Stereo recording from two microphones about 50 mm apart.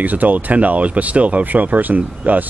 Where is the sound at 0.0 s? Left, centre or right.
Right.